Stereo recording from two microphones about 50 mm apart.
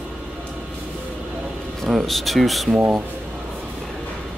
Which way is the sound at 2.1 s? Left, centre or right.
Centre.